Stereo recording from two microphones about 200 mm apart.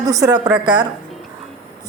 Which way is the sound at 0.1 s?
15° right (ahead or behind).